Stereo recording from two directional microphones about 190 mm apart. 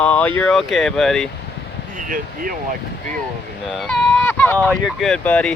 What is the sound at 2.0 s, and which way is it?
Speech, 45° right (ahead or behind).